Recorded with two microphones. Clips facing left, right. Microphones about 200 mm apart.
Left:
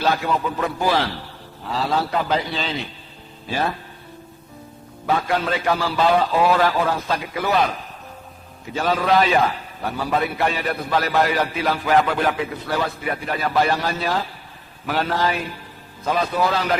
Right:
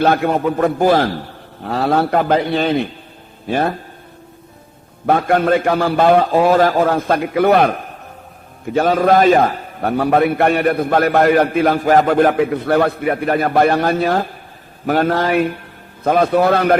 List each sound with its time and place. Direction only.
0.0 s a man's voice: 55° right (ahead or behind)
5.0 s a man's voice: 55° right (ahead or behind)